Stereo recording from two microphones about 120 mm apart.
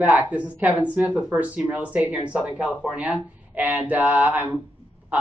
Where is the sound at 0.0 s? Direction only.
10° right (ahead or behind).